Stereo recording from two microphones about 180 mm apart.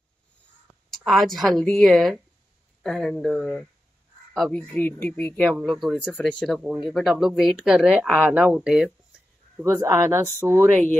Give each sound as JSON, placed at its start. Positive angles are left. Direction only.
{"t": 0.8, "sound": "speech", "side_deg": 0}
{"t": 9.6, "sound": "a man's voice", "side_deg": -15}